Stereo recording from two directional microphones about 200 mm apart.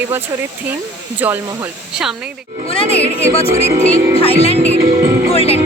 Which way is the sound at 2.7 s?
30° left (ahead or behind).